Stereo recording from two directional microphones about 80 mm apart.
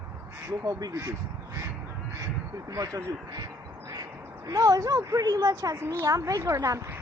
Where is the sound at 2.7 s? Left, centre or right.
Right.